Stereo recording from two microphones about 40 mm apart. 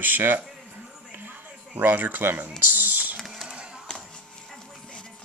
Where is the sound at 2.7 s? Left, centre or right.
Right.